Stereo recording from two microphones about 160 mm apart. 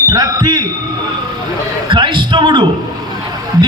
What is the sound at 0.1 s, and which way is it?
Speech, 25° right (ahead or behind).